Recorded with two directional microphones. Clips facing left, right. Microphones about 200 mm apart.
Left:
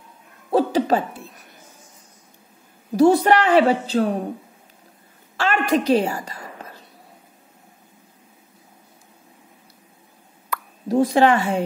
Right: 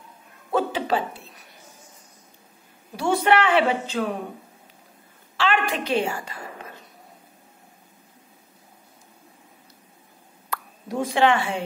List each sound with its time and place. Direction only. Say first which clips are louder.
0.5 s a sound: left 5 dB; 35° left (ahead or behind)
3.0 s a woman's voice: left 6 dB; 40° left (ahead or behind)
5.4 s a woman's voice: left 4 dB; 40° left (ahead or behind)
10.9 s a woman's voice: left 5 dB; 35° left (ahead or behind)